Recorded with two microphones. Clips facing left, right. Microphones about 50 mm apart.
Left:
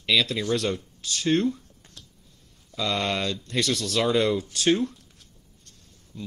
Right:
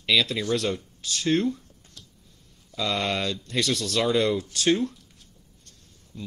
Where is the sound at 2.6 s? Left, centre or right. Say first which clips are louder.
Even; centre.